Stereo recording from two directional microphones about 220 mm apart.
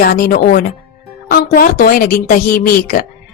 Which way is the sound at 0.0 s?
40° left (ahead or behind).